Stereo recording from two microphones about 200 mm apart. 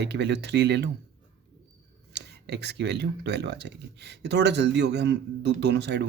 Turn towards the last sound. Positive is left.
turn(degrees=-60)  # may be behind; listen again after turning